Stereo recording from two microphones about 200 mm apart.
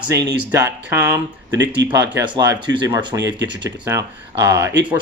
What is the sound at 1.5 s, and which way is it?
Speech, 60° right (ahead or behind).